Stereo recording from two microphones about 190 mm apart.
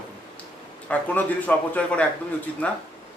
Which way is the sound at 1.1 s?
10° left (ahead or behind).